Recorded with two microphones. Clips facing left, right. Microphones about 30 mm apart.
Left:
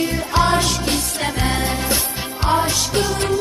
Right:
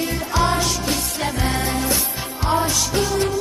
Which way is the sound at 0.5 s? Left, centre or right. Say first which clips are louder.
Left 2 dB; left.